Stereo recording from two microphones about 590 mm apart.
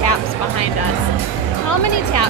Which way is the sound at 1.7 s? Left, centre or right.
Left.